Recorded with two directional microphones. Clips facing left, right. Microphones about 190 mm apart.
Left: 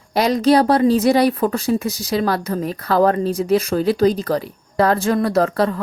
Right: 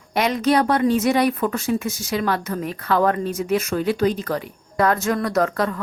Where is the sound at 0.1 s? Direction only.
35° left (ahead or behind).